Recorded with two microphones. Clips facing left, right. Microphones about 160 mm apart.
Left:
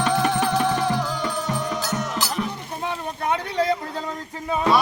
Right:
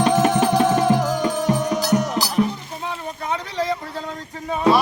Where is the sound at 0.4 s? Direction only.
45° right (ahead or behind).